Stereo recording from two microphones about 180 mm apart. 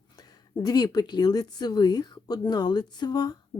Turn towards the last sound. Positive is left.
turn(degrees=20)  # may be behind; listen again after turning